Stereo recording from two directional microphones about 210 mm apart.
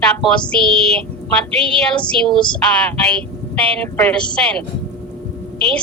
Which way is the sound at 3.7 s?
5° left (ahead or behind).